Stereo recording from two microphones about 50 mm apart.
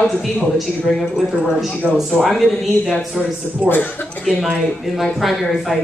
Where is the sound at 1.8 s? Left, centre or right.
Right.